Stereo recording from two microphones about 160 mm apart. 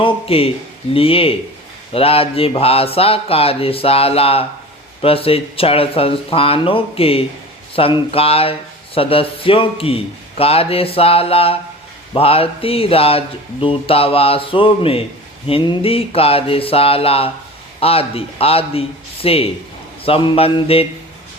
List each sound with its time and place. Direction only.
0.0 s a man's voice: 35° left (ahead or behind)